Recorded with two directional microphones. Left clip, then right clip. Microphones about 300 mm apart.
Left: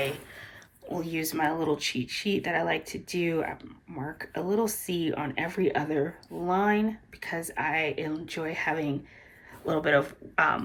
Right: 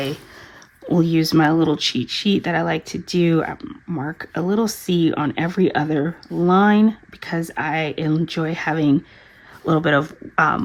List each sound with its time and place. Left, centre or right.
0.9 s speech: centre